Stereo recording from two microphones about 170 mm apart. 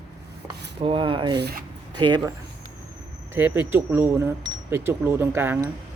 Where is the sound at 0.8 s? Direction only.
30° right (ahead or behind).